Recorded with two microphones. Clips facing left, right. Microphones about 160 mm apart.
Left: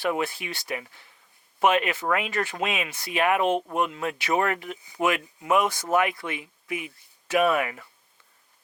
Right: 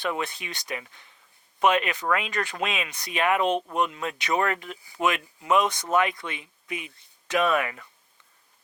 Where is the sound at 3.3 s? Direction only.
20° left (ahead or behind).